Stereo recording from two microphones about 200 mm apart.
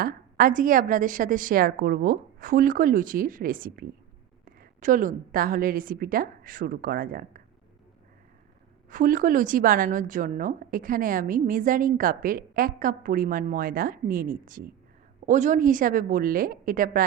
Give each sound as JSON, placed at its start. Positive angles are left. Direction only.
{"t": 0.0, "sound": "a woman's voice", "side_deg": -45}
{"t": 8.9, "sound": "a woman's voice", "side_deg": -40}